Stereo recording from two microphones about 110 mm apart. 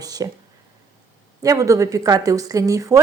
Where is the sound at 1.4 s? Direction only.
30° right (ahead or behind).